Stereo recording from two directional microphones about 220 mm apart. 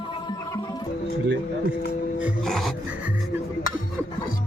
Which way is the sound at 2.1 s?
Centre (ahead or behind).